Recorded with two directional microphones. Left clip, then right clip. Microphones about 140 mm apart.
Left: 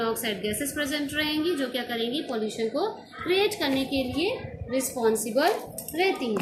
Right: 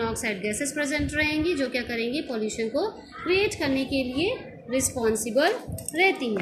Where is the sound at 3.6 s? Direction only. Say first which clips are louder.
Even; 25° right (ahead or behind).